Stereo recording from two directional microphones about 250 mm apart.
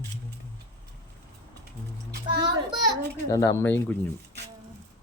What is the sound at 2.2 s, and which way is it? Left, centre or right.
Music, centre.